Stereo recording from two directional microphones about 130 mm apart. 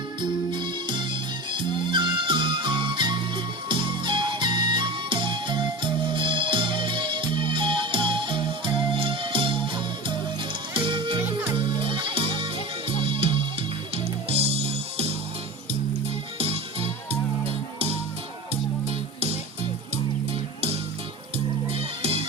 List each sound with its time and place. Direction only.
0.2 s music: 35° right (ahead or behind)
16.4 s music: 50° right (ahead or behind)
18.9 s music: 50° right (ahead or behind)
21.3 s music: 50° right (ahead or behind)